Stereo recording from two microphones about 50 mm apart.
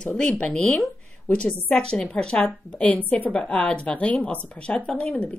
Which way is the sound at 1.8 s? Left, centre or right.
Centre.